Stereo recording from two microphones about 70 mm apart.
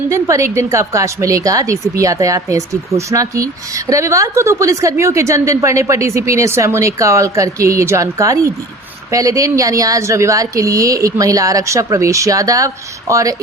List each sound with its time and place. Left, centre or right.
0.1 s a woman's voice: right